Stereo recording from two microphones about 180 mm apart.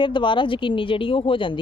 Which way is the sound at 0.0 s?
25° left (ahead or behind).